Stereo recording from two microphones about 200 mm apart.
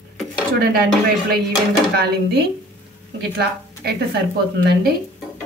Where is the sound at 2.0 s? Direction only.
55° right (ahead or behind).